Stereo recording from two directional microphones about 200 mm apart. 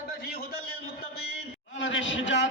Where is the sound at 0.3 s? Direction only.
50° left (ahead or behind).